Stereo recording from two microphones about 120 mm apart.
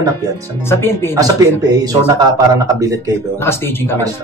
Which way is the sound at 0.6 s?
20° left (ahead or behind).